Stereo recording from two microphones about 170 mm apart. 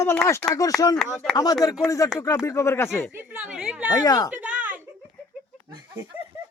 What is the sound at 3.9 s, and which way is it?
Speech, 20° left (ahead or behind).